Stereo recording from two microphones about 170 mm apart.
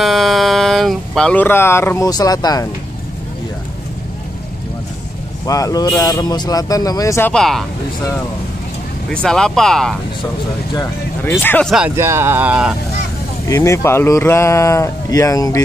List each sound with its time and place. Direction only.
0.0 s speech: centre (ahead or behind); by 2.7 s 20° left (ahead or behind)
5.5 s speech: 20° left (ahead or behind)
7.3 s speech: centre (ahead or behind)
9.1 s speech: 5° left (ahead or behind)
11.2 s speech: 10° left (ahead or behind)
12.0 s speech: 15° right (ahead or behind)
13.5 s speech: 20° left (ahead or behind)